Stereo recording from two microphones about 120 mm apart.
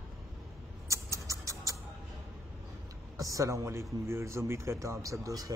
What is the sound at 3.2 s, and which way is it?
A man's voice, 30° right (ahead or behind).